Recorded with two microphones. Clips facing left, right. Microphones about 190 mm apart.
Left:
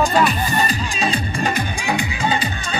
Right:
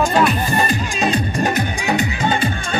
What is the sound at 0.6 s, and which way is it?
Music, 50° right (ahead or behind).